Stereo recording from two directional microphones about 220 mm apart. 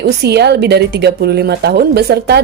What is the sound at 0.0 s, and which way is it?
Speech, 50° right (ahead or behind).